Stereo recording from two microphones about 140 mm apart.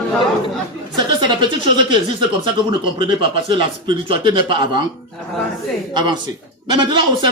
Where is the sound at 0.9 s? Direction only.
35° right (ahead or behind).